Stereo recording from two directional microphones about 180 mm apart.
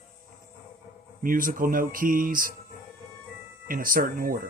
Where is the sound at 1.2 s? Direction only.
50° right (ahead or behind).